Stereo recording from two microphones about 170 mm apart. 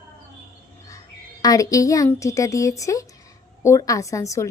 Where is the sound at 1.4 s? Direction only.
20° left (ahead or behind).